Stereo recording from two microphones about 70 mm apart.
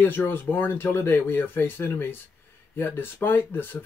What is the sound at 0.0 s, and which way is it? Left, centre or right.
Speech, left.